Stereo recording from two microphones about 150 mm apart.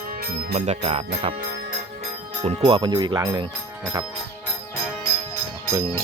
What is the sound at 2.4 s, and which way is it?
Speech, 40° right (ahead or behind).